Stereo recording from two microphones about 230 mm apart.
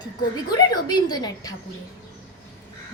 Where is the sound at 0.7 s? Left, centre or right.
Centre.